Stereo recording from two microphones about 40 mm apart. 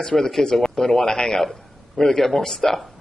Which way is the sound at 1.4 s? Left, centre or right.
Centre.